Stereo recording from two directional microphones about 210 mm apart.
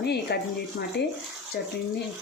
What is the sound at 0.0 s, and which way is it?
Speech, 50° left (ahead or behind).